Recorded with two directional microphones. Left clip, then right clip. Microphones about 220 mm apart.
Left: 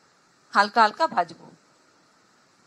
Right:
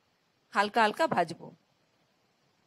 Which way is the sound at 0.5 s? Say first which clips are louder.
Left 7 dB; 45° right (ahead or behind).